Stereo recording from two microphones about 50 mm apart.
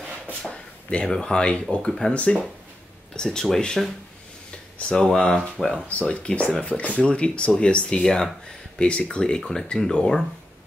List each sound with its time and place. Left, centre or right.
0.4 s speech: left
2.1 s speech: left
3.3 s speech: centre
5.1 s speech: centre